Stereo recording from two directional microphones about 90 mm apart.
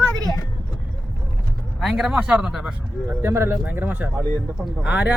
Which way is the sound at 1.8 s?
5° right (ahead or behind).